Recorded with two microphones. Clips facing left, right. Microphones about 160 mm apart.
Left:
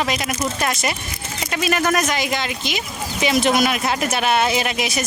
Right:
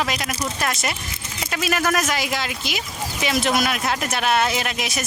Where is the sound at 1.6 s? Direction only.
5° right (ahead or behind).